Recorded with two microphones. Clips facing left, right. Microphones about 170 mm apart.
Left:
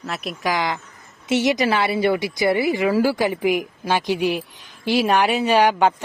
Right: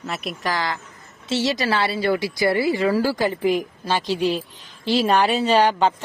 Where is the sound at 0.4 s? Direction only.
15° left (ahead or behind).